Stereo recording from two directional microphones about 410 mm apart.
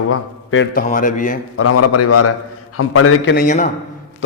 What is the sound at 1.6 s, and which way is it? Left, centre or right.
A man's voice, left.